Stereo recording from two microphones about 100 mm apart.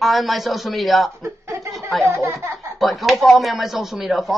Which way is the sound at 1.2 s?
30° right (ahead or behind).